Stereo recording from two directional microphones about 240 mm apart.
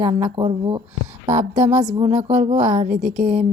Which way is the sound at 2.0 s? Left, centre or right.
Centre.